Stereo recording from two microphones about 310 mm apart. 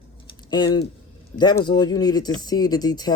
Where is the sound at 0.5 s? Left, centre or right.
Centre.